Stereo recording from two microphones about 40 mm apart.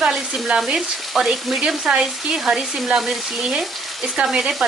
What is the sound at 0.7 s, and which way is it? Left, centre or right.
Frying, centre.